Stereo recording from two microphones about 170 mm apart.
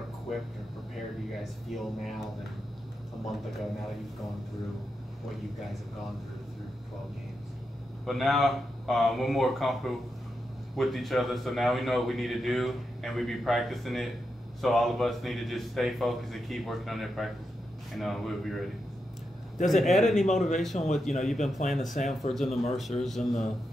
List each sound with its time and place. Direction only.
1.4 s a man's voice: centre (ahead or behind)
8.0 s a man's voice: centre (ahead or behind)
20.2 s speech: 45° left (ahead or behind)
20.5 s a man's voice: centre (ahead or behind)
21.6 s speech: 45° left (ahead or behind)
22.3 s a man's voice: centre (ahead or behind)